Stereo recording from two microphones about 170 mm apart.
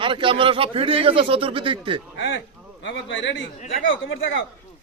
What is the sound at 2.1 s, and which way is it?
Speech, 90° left.